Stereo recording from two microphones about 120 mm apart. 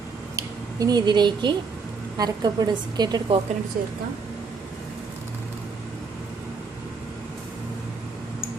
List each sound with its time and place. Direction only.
0.3 s a woman's voice: 30° right (ahead or behind)